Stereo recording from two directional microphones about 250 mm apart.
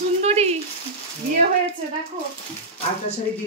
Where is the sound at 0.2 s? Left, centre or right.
Right.